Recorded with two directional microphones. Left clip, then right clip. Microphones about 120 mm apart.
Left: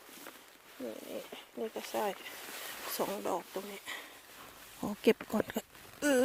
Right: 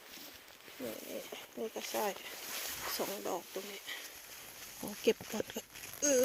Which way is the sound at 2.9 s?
55° left (ahead or behind).